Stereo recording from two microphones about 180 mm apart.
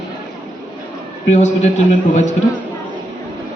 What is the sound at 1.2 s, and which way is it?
A man's voice, 40° left (ahead or behind).